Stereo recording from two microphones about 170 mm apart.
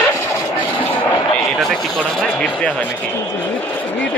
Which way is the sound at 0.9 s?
10° left (ahead or behind).